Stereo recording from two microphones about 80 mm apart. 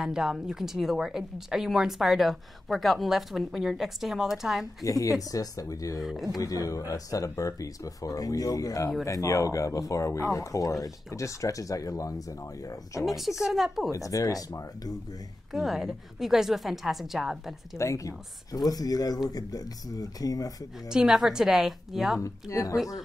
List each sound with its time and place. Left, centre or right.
0.0 s a woman's voice: centre
4.8 s speech: left
5.9 s a woman's voice: centre
6.3 s speech: left
13.0 s a woman's voice: centre
13.9 s speech: left
15.5 s a woman's voice: centre
17.7 s speech: left
20.9 s a woman's voice: centre
22.2 s speech: left